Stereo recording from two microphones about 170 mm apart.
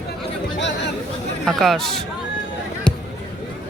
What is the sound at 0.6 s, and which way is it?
Chatter, 90° left.